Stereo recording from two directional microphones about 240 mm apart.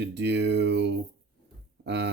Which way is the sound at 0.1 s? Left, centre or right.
Right.